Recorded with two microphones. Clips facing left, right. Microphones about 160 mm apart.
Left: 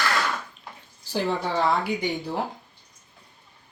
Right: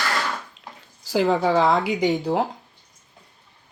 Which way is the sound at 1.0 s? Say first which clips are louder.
Right 7 dB; 90° right.